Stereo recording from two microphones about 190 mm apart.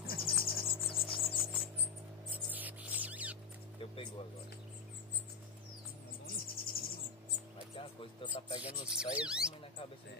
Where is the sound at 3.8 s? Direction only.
25° left (ahead or behind).